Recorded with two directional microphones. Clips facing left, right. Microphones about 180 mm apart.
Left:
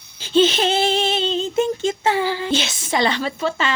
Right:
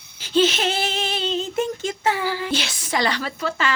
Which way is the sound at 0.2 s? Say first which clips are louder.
Left 3 dB; 25° left (ahead or behind).